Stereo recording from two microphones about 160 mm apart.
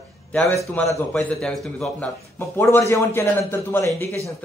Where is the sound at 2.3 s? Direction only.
15° left (ahead or behind).